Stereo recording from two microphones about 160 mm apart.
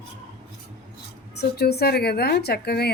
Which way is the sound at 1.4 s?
90° left.